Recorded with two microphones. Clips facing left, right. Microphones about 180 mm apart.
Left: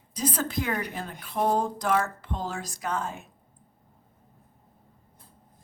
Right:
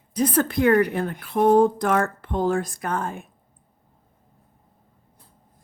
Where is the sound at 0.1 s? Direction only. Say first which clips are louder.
Right 8 dB; 60° right (ahead or behind).